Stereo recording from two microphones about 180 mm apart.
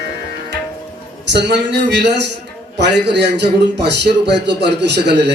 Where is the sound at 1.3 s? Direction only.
75° right (ahead or behind).